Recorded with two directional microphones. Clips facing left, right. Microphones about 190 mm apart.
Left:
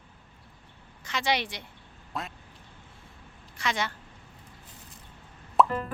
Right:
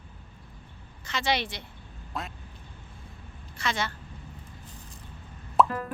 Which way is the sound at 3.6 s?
15° left (ahead or behind).